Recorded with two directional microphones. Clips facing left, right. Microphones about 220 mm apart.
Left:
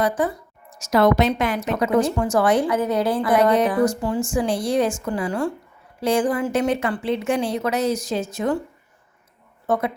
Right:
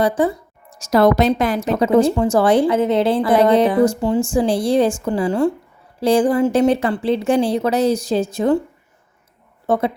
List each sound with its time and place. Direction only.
0.0 s a woman's voice: 30° right (ahead or behind)
9.6 s speech: 30° right (ahead or behind)